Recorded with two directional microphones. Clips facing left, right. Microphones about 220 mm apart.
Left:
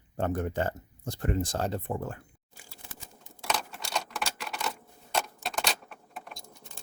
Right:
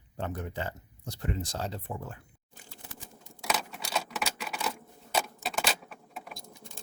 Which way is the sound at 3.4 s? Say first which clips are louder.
Even; centre (ahead or behind).